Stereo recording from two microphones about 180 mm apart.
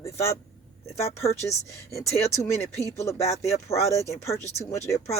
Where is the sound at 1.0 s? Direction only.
35° left (ahead or behind).